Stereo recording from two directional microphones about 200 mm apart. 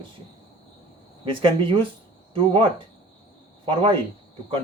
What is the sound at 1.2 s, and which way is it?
Speech, 25° right (ahead or behind).